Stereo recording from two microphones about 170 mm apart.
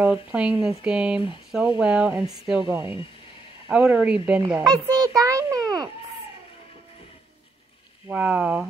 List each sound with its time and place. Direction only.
0.0 s a child's voice: 10° right (ahead or behind)
8.1 s speech: 10° right (ahead or behind)